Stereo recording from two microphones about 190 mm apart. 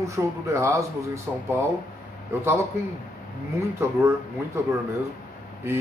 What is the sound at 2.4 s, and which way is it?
Speech, 15° right (ahead or behind).